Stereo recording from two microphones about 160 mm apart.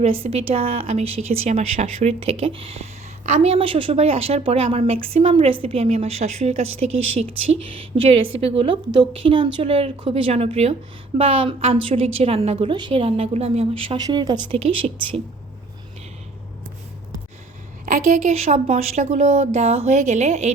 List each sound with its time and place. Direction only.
0.0 s a woman's voice: 35° right (ahead or behind)
13.9 s a woman's voice: 25° right (ahead or behind)
17.9 s a woman's voice: 50° right (ahead or behind)